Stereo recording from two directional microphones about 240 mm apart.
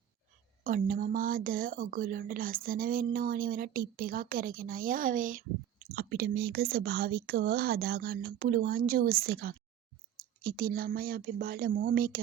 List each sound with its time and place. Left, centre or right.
0.6 s speech: right